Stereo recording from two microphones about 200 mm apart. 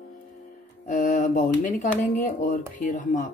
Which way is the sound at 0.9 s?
40° left (ahead or behind).